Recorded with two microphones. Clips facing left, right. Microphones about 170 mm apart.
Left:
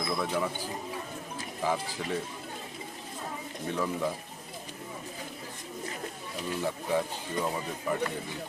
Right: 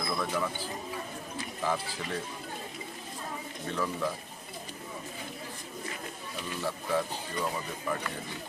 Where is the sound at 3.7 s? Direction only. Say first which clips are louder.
Left 2 dB; 15° left (ahead or behind).